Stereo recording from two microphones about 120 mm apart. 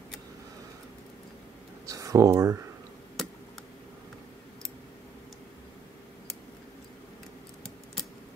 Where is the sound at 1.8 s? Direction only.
25° right (ahead or behind).